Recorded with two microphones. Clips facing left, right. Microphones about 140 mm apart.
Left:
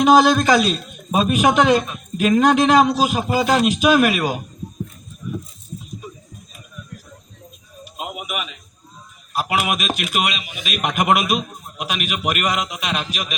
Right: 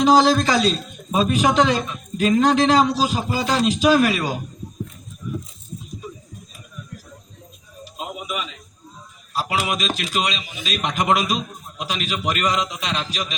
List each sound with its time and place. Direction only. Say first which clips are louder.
0.2 s a man's voice: left 2 dB; 15° left (ahead or behind)
7.9 s a sound: left 1 dB; 15° left (ahead or behind)
9.3 s a man's voice: left 2 dB; 15° left (ahead or behind)